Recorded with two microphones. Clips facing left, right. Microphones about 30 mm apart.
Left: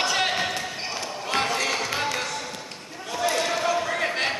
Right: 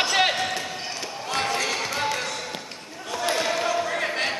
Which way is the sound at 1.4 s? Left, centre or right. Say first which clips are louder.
Right 2 dB; centre.